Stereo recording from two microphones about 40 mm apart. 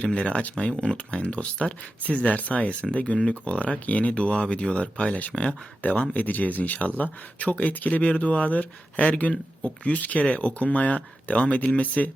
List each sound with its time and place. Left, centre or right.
0.0 s speech: left
0.5 s speech: left
2.0 s speech: left